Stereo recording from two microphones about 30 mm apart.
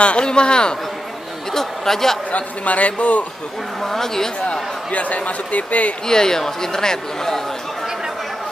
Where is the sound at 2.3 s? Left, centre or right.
Left.